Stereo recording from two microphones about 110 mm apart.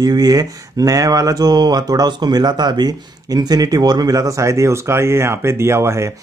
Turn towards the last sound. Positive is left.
turn(degrees=-25)  # may be behind; listen again after turning